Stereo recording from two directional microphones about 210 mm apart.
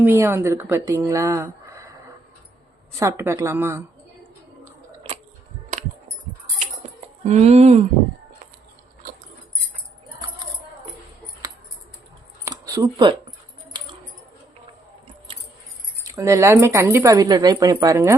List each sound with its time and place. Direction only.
0.0 s speech: 10° right (ahead or behind)
3.0 s speech: 10° right (ahead or behind)
7.3 s speech: 30° right (ahead or behind)
12.5 s a sound: 15° right (ahead or behind)
16.0 s speech: 15° right (ahead or behind)